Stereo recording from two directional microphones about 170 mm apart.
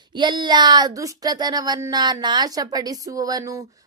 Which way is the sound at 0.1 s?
25° right (ahead or behind).